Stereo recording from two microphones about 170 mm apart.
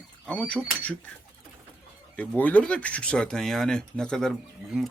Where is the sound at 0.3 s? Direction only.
5° left (ahead or behind).